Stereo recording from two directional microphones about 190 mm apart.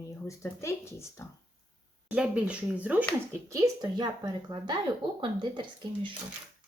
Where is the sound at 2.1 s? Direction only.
5° right (ahead or behind).